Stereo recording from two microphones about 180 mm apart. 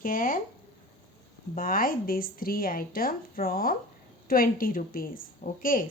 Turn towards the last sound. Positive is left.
turn(degrees=50)  # may be behind; listen again after turning